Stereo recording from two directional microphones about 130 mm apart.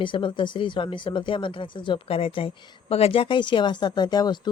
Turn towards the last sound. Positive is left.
turn(degrees=30)  # may be behind; listen again after turning